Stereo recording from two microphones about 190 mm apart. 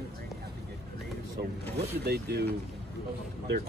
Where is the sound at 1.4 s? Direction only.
55° right (ahead or behind).